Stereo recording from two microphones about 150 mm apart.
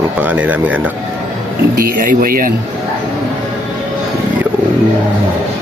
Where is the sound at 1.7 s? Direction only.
70° right (ahead or behind).